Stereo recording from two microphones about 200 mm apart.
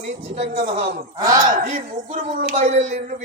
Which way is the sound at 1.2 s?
15° right (ahead or behind).